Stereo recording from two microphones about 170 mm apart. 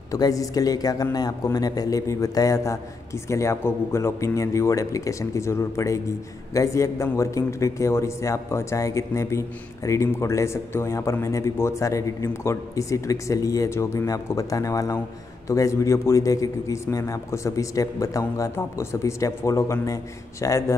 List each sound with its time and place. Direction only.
0.1 s a man's voice: 20° left (ahead or behind)